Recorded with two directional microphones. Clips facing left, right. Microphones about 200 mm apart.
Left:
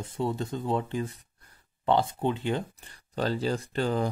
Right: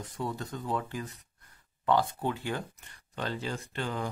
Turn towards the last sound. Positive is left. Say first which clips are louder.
# left 7 dB
turn(degrees=35)  # may be behind; listen again after turning